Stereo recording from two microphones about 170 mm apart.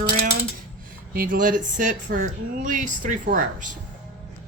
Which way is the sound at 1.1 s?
55° right (ahead or behind).